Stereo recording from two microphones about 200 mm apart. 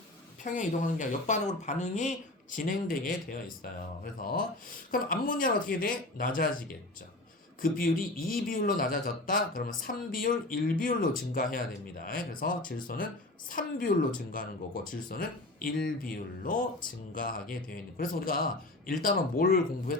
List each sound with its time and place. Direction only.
0.4 s speech: 40° left (ahead or behind)
14.8 s speech: 45° left (ahead or behind)